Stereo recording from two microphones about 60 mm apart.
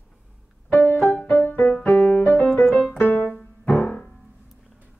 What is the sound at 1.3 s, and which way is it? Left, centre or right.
Music, left.